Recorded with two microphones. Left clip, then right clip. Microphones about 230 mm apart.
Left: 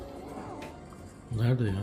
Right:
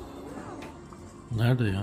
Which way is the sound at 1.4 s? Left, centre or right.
Centre.